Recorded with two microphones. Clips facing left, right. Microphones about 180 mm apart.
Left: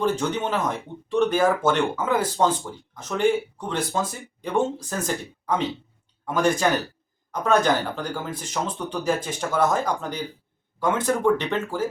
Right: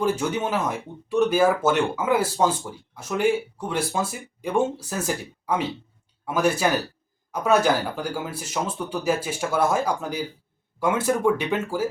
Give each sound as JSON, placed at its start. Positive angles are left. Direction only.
{"t": 0.0, "sound": "speech", "side_deg": -10}